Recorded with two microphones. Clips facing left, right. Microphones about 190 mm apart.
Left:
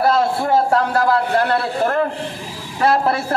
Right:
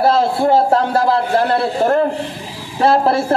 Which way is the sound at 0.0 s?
25° right (ahead or behind).